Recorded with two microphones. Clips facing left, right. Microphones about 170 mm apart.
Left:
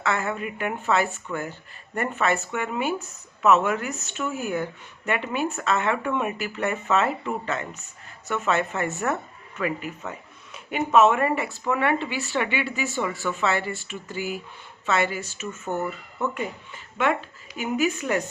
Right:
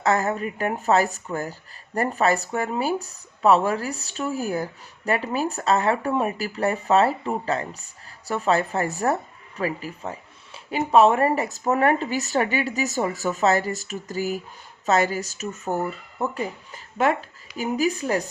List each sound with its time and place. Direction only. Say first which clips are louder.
0.0 s speech: right 4 dB; 40° right (ahead or behind)